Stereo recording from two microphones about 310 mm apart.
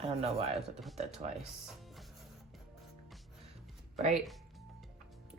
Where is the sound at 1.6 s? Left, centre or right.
Centre.